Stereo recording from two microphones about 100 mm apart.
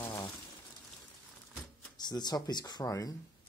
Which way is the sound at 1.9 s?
45° left (ahead or behind).